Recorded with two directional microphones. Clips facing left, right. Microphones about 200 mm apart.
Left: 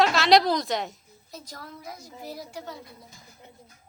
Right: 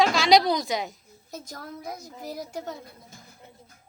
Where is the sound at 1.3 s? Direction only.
45° right (ahead or behind).